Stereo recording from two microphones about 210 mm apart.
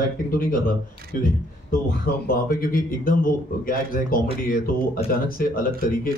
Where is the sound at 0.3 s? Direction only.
40° left (ahead or behind).